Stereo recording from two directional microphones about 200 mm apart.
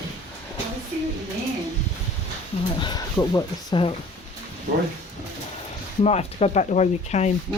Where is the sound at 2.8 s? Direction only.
20° left (ahead or behind).